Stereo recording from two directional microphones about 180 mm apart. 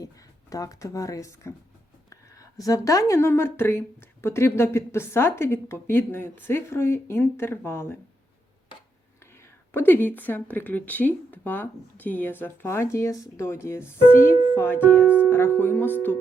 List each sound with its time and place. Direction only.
0.5 s speech: 20° left (ahead or behind)
9.4 s speech: 10° left (ahead or behind)
15.0 s speech: 10° right (ahead or behind)
15.3 s speech: 10° left (ahead or behind)